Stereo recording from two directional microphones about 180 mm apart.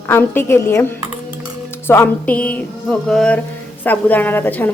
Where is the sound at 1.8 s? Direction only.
10° left (ahead or behind).